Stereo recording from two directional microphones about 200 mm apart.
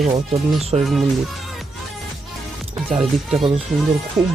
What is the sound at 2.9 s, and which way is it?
Speech, 25° right (ahead or behind).